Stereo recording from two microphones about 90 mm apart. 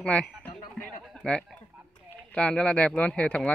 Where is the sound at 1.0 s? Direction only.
5° left (ahead or behind).